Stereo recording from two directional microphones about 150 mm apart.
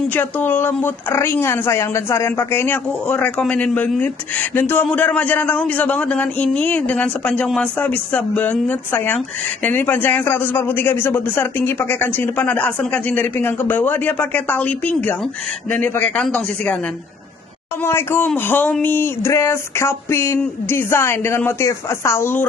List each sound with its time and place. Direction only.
0.1 s speech: 10° left (ahead or behind)
17.8 s speech: 15° left (ahead or behind)